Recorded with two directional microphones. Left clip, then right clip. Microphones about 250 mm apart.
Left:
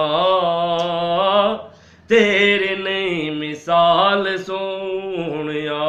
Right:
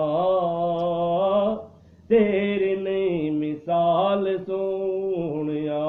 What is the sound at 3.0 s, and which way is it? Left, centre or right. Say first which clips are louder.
Mantra: left 2 dB; left.